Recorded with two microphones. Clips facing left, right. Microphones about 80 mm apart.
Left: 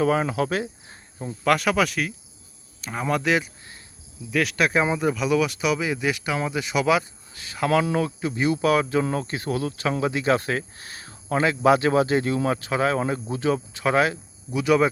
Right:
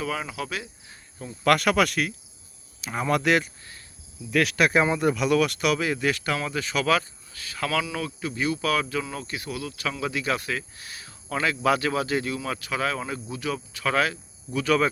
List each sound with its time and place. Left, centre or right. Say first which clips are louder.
0.0 s speech: left 9 dB; left
1.5 s speech: even; centre
7.3 s cricket: left 6 dB; left
7.9 s speech: left 7 dB; left; by 14.8 s centre